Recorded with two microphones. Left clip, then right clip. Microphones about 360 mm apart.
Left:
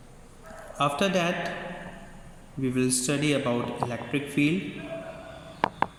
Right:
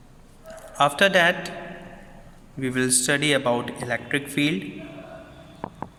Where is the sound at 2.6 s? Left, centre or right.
Right.